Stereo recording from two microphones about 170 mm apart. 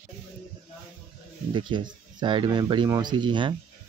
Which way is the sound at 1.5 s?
30° right (ahead or behind).